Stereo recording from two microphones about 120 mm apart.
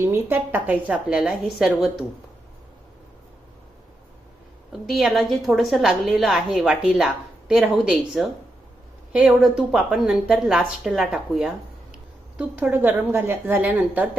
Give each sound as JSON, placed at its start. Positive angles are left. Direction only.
{"t": 0.0, "sound": "a woman's voice", "side_deg": -20}
{"t": 4.7, "sound": "a woman's voice", "side_deg": 0}
{"t": 12.4, "sound": "a woman's voice", "side_deg": -20}